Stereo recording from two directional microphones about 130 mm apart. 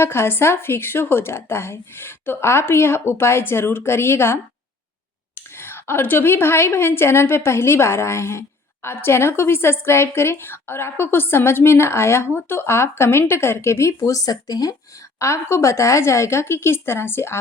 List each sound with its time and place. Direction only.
0.0 s speech: 20° left (ahead or behind)